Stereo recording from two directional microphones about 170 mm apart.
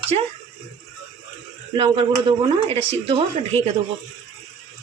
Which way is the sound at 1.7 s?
30° right (ahead or behind).